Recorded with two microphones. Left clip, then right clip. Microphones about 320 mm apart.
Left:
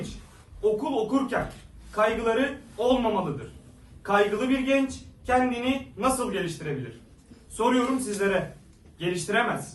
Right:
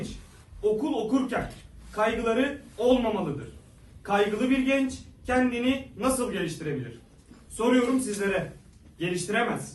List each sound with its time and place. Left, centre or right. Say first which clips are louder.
0.6 s a man's voice: left 1 dB; centre
7.8 s a man's voice: even; centre